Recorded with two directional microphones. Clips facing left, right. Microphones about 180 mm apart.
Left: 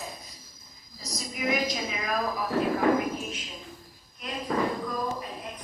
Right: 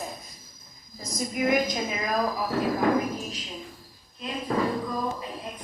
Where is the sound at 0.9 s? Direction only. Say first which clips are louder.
Right 7 dB; 50° right (ahead or behind).